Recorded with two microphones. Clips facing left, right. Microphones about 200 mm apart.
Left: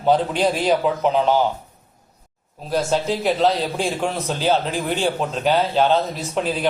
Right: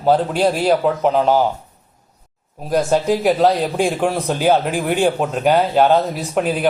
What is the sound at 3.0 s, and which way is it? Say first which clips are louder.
Speech: right 4 dB; 10° right (ahead or behind).